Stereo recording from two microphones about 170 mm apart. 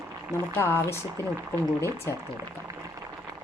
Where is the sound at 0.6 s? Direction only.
15° left (ahead or behind).